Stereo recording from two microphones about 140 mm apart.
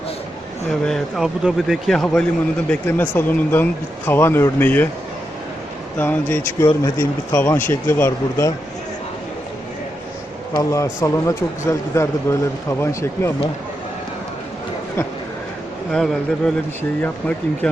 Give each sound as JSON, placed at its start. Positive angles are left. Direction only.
{"t": 0.7, "sound": "speech", "side_deg": 5}
{"t": 6.0, "sound": "speech", "side_deg": 15}
{"t": 6.7, "sound": "speech", "side_deg": 30}
{"t": 7.3, "sound": "speech", "side_deg": 15}
{"t": 10.6, "sound": "speech", "side_deg": 20}
{"t": 15.9, "sound": "speech", "side_deg": 5}